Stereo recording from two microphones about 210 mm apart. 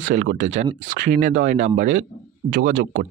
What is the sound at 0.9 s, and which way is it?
Speech, 35° right (ahead or behind).